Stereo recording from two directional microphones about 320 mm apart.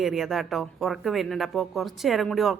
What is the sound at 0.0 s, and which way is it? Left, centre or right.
Speech, centre.